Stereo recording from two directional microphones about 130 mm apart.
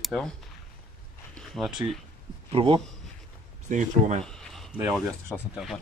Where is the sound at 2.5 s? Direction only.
45° right (ahead or behind).